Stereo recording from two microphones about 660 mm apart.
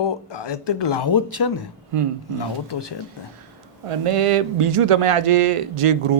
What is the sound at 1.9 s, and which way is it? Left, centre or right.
Speech, right.